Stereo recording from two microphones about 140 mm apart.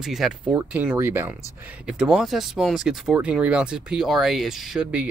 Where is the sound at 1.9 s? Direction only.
5° right (ahead or behind).